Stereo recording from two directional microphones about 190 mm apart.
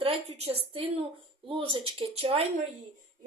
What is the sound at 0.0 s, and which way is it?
Speech, 30° right (ahead or behind).